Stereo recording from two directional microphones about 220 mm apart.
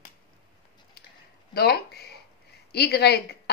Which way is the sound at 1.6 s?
45° left (ahead or behind).